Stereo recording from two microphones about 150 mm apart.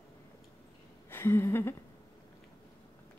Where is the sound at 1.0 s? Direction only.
15° left (ahead or behind).